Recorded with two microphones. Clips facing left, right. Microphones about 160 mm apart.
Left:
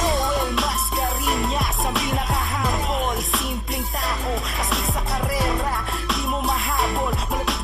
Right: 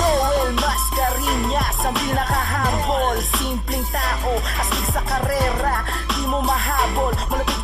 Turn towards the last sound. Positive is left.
turn(degrees=0)  # may be behind; listen again after turning